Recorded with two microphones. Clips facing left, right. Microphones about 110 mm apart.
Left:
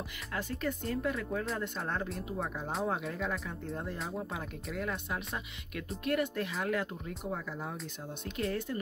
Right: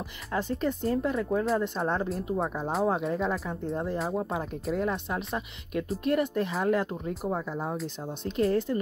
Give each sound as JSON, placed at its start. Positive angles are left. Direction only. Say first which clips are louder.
{"t": 0.3, "sound": "speech", "louder": "right 7 dB", "side_deg": -25}
{"t": 2.3, "sound": "speech", "louder": "right 7 dB", "side_deg": -40}